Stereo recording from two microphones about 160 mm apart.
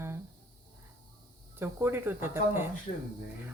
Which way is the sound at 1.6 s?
15° right (ahead or behind).